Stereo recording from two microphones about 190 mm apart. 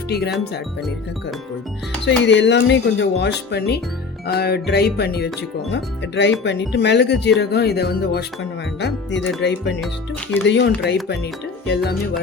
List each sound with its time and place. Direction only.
0.1 s speech: 60° left (ahead or behind)
2.0 s speech: 70° left (ahead or behind)
5.7 s speech: 70° left (ahead or behind)
8.8 s speech: 70° left (ahead or behind)